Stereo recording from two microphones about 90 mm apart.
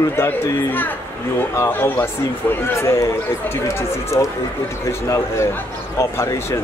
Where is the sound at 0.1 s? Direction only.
30° left (ahead or behind).